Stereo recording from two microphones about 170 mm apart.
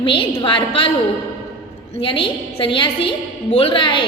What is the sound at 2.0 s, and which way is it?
A woman's voice, 30° left (ahead or behind).